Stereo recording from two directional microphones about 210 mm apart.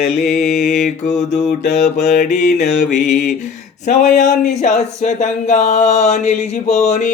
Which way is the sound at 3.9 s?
35° left (ahead or behind).